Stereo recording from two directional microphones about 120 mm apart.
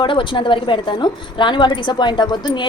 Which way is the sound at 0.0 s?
45° left (ahead or behind).